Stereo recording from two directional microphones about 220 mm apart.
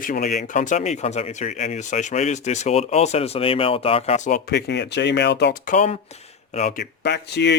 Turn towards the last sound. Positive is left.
turn(degrees=50)  # may be behind; listen again after turning